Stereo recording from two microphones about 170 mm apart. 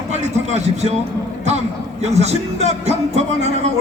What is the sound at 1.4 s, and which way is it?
A man's voice, 40° right (ahead or behind).